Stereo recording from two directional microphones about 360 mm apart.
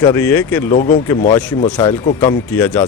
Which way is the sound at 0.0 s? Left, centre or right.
Centre.